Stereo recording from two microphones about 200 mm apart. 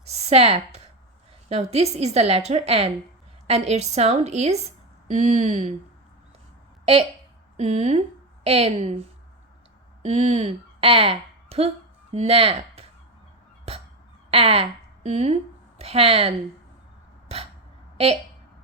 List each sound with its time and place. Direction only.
0.1 s a woman's voice: 30° right (ahead or behind)
7.5 s a woman's voice: 35° right (ahead or behind)
10.0 s a woman's voice: 35° right (ahead or behind)
14.3 s a woman's voice: 30° right (ahead or behind)
17.2 s a sound: 30° right (ahead or behind)